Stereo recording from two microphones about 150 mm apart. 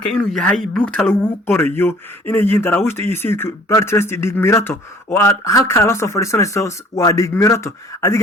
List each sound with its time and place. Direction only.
0.1 s speech: 5° left (ahead or behind); by 8.2 s 20° left (ahead or behind)